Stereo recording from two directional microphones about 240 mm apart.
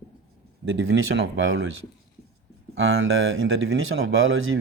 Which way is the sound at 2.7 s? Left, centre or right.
Right.